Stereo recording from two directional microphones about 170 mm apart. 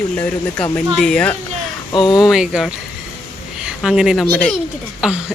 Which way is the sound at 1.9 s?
25° left (ahead or behind).